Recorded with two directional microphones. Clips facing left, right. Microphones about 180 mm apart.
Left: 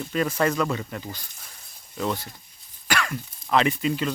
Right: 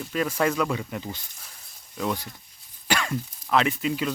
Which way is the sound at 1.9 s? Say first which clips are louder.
Left 1 dB; 10° right (ahead or behind).